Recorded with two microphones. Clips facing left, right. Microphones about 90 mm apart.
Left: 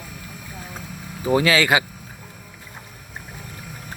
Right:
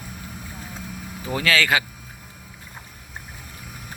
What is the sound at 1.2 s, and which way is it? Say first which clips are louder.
Speech: left 4 dB; 20° left (ahead or behind).